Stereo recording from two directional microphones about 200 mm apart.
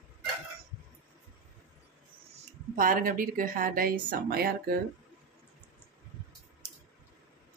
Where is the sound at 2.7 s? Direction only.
45° right (ahead or behind).